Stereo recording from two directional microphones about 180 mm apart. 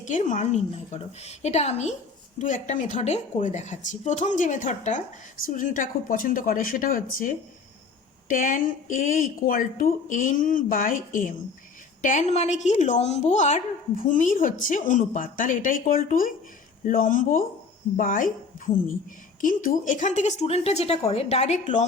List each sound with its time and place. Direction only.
0.0 s a woman's voice: 40° left (ahead or behind)